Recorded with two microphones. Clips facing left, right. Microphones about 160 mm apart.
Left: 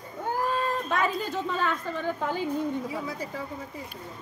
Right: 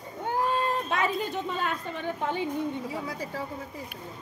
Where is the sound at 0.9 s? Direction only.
20° right (ahead or behind).